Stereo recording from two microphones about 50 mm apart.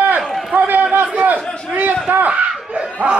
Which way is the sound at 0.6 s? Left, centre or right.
Right.